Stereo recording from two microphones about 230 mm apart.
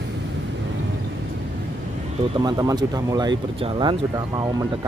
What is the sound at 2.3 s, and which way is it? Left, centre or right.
Speech, centre.